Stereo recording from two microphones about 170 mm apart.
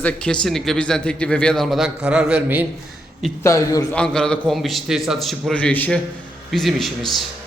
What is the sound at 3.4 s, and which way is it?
Speech, 20° left (ahead or behind).